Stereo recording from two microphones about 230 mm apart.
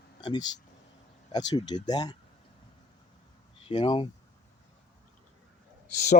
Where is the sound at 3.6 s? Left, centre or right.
Left.